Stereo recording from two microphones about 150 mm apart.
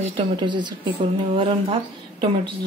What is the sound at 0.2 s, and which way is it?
Speech, 30° right (ahead or behind).